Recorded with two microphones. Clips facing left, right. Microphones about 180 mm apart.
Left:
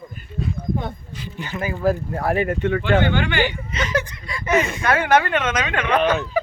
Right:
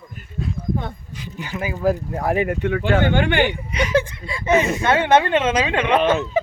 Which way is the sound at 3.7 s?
10° right (ahead or behind).